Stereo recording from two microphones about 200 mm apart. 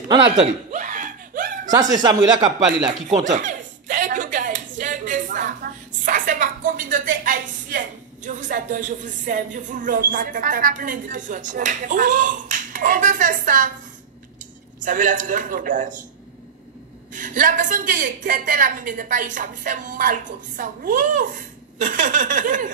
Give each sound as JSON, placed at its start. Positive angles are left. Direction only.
{"t": 0.7, "sound": "a sound", "side_deg": -40}
{"t": 1.7, "sound": "speech", "side_deg": -20}
{"t": 2.9, "sound": "chuckle", "side_deg": -40}
{"t": 4.7, "sound": "a sound", "side_deg": -40}
{"t": 14.8, "sound": "a woman's voice", "side_deg": -40}
{"t": 17.1, "sound": "a woman's voice", "side_deg": -40}